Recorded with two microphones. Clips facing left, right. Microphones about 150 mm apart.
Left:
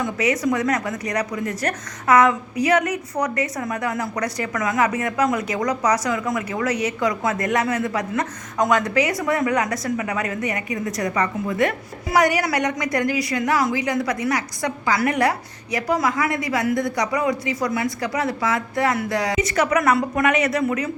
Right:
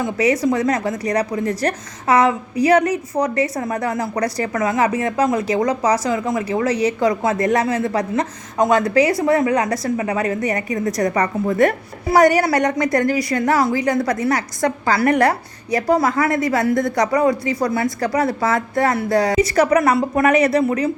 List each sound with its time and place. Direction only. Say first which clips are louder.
0.0 s a woman's voice: right 4 dB; 30° right (ahead or behind)
14.3 s a woman's voice: right 5 dB; 55° right (ahead or behind)
15.7 s a woman's voice: right 5 dB; 30° right (ahead or behind)
16.3 s a woman's voice: right 4 dB; 45° right (ahead or behind)
17.2 s a woman's voice: right 5 dB; 35° right (ahead or behind)